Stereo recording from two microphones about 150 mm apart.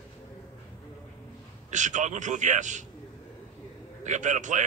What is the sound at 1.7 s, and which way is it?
A man's voice, 55° right (ahead or behind).